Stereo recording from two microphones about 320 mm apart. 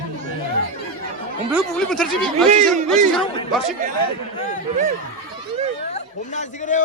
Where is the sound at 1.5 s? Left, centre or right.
Centre.